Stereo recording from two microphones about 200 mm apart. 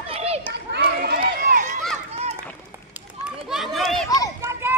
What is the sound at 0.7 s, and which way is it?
Run, 50° right (ahead or behind).